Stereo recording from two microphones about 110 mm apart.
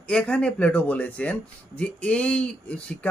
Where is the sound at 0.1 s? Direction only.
10° left (ahead or behind).